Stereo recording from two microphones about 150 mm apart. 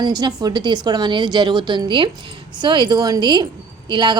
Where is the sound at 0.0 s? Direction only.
25° right (ahead or behind).